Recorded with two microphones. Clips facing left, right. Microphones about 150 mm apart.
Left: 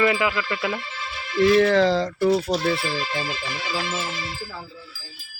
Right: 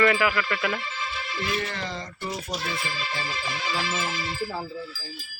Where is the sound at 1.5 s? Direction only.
90° left.